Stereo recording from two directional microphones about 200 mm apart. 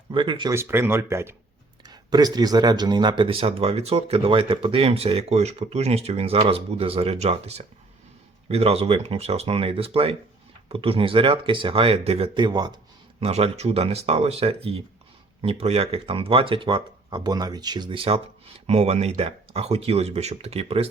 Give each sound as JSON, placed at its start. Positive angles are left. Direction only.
{"t": 0.1, "sound": "speech", "side_deg": -25}
{"t": 0.5, "sound": "speech", "side_deg": -10}